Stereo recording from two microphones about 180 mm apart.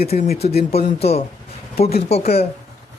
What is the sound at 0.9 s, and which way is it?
Speech, 35° left (ahead or behind).